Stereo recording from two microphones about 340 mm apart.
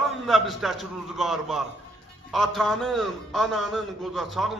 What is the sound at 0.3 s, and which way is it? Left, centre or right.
A man's voice, centre.